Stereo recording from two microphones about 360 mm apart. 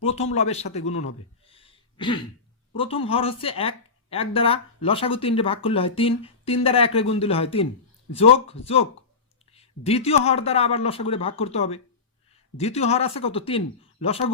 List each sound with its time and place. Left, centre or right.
0.0 s a man's voice: centre